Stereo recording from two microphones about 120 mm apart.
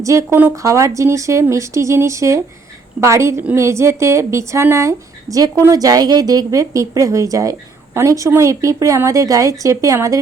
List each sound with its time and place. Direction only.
0.0 s speech: 25° right (ahead or behind)